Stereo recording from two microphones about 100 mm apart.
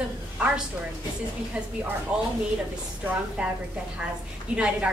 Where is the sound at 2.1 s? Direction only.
10° right (ahead or behind).